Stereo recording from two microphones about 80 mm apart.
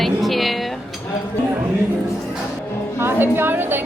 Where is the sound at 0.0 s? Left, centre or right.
Centre.